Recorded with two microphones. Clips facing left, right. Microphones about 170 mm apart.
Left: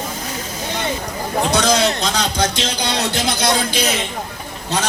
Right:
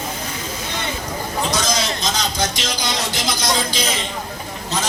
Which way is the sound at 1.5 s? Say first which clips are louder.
Left 8 dB; 60° left (ahead or behind).